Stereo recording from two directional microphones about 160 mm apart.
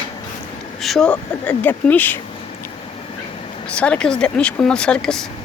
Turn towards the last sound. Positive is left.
turn(degrees=5)  # may be behind; listen again after turning